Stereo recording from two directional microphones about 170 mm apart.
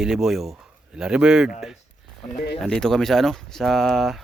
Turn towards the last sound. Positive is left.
turn(degrees=0)  # may be behind; listen again after turning